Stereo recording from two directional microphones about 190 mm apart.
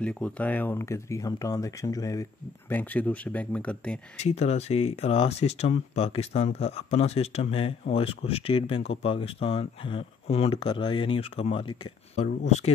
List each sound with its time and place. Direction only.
0.0 s speech: 5° left (ahead or behind)
4.2 s speech: 35° left (ahead or behind)